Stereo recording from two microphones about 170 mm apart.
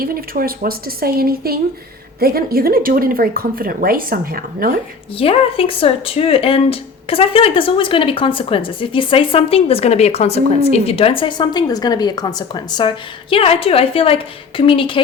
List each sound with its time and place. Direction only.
0.0 s speech: 60° right (ahead or behind)
5.1 s speech: 35° left (ahead or behind)